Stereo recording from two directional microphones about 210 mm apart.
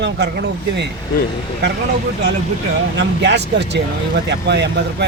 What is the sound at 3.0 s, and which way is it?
Speech, 55° right (ahead or behind).